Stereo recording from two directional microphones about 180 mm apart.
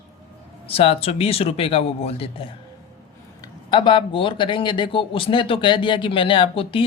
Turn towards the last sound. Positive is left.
turn(degrees=30)  # may be behind; listen again after turning